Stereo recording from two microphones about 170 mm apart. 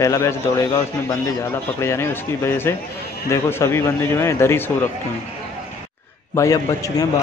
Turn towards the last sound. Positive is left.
turn(degrees=20)  # may be behind; listen again after turning